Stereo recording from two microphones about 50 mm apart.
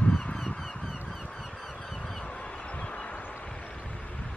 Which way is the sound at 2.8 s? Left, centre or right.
Left.